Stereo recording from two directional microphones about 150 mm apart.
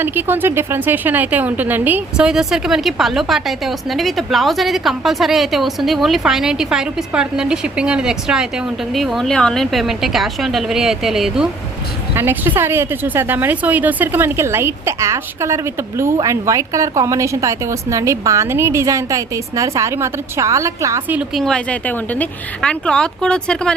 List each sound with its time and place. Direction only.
0.0 s speech: 15° right (ahead or behind)
12.1 s a woman's voice: 15° right (ahead or behind)
21.2 s speech: centre (ahead or behind)